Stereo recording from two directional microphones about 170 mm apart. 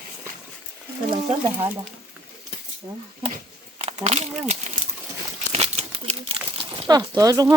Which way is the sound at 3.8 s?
40° right (ahead or behind).